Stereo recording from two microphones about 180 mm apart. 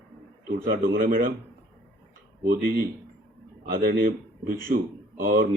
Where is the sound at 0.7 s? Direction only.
55° right (ahead or behind).